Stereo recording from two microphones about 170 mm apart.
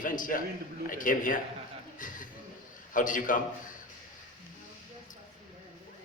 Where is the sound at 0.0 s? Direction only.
55° left (ahead or behind).